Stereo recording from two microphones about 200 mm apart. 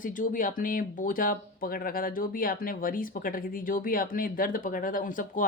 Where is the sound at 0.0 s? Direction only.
40° left (ahead or behind).